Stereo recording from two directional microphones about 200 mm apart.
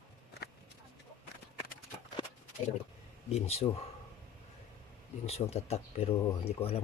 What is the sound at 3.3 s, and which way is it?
Speech, 30° left (ahead or behind).